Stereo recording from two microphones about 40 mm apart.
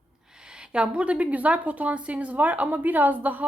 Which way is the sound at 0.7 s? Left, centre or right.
Right.